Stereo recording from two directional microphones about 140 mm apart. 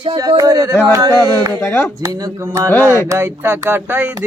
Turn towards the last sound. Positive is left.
turn(degrees=-15)  # may be behind; listen again after turning